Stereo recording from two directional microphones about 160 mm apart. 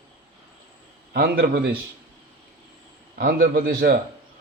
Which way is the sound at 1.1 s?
90° right.